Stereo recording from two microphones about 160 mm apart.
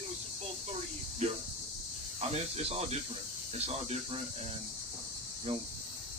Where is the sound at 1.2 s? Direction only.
45° right (ahead or behind).